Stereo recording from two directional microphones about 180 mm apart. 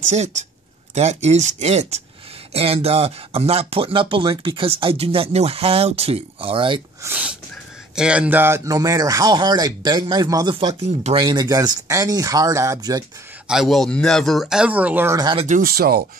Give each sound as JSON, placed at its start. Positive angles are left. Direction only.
{"t": 0.1, "sound": "speech", "side_deg": -40}
{"t": 7.0, "sound": "a sound", "side_deg": -10}
{"t": 7.9, "sound": "speech", "side_deg": -5}
{"t": 13.5, "sound": "speech", "side_deg": 0}
{"t": 15.3, "sound": "speech", "side_deg": -45}